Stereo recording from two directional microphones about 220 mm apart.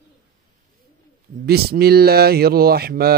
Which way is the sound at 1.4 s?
45° right (ahead or behind).